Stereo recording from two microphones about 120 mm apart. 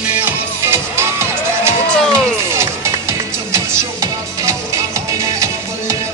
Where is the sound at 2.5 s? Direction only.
25° right (ahead or behind).